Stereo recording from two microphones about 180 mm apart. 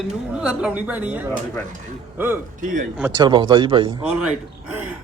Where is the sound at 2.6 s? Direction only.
45° right (ahead or behind).